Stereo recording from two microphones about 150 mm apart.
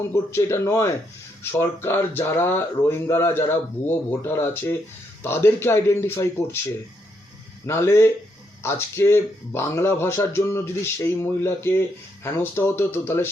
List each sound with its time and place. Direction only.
0.1 s speech: 20° left (ahead or behind)
7.6 s speech: 15° left (ahead or behind)